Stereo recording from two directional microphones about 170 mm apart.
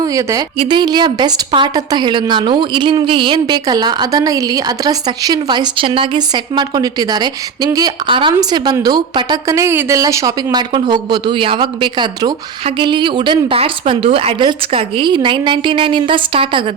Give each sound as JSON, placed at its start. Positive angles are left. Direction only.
{"t": 0.0, "sound": "speech", "side_deg": -20}
{"t": 0.5, "sound": "a woman's voice", "side_deg": -30}